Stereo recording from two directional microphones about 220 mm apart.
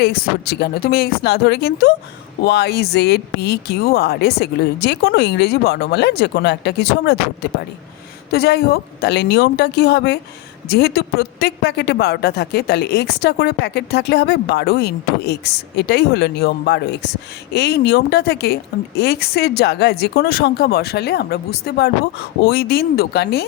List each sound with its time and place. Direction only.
0.0 s speech: 45° left (ahead or behind)
8.3 s speech: 45° left (ahead or behind)